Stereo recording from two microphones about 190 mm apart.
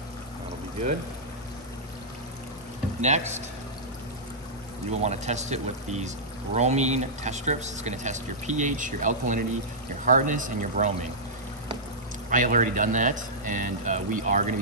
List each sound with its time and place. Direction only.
3.0 s speech: 35° right (ahead or behind)
4.9 s speech: 35° right (ahead or behind)
12.3 s speech: 45° right (ahead or behind)